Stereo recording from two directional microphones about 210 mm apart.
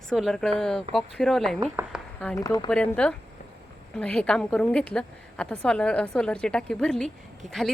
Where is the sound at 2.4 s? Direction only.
20° left (ahead or behind).